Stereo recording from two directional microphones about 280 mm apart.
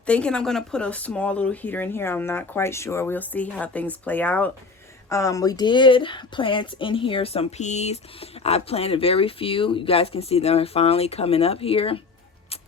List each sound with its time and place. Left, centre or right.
0.0 s speech: centre